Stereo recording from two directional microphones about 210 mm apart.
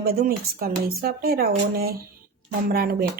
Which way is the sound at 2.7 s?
45° right (ahead or behind).